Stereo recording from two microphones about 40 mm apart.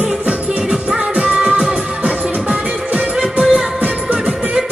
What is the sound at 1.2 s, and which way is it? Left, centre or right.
Music, right.